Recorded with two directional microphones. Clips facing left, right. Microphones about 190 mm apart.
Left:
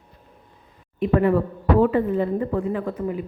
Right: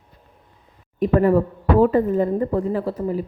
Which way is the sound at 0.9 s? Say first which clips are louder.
Right 2 dB; 40° right (ahead or behind).